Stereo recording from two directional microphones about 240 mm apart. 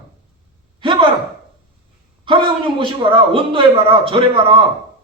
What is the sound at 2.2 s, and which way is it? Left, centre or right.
A man's voice, right.